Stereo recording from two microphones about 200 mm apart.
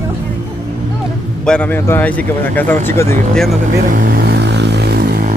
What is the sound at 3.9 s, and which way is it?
Vehicle, 45° right (ahead or behind).